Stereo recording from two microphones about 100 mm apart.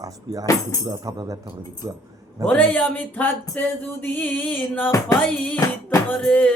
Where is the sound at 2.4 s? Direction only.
15° left (ahead or behind).